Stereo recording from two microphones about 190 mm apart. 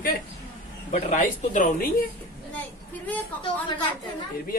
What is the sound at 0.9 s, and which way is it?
Speech, 40° left (ahead or behind).